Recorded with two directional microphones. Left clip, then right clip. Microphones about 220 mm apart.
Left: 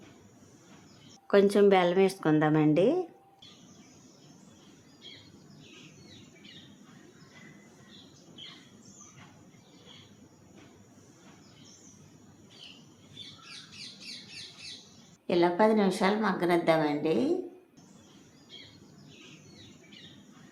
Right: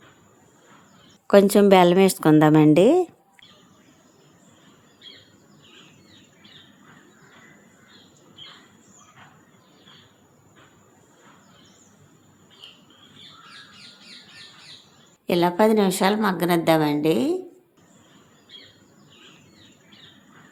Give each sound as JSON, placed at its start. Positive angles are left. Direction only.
{"t": 1.3, "sound": "a woman's voice", "side_deg": -35}
{"t": 15.3, "sound": "a woman's voice", "side_deg": -40}